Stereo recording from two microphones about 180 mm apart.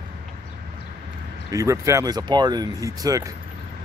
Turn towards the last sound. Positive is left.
turn(degrees=-20)  # may be behind; listen again after turning